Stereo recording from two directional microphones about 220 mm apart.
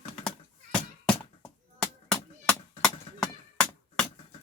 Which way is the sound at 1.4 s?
5° left (ahead or behind).